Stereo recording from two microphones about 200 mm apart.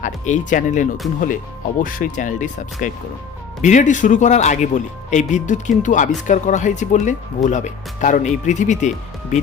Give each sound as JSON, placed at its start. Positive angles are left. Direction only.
{"t": 0.0, "sound": "speech", "side_deg": 40}